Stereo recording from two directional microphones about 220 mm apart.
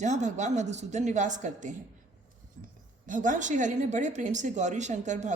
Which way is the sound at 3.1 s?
35° right (ahead or behind).